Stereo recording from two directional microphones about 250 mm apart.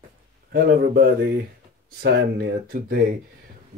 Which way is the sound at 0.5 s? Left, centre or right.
Right.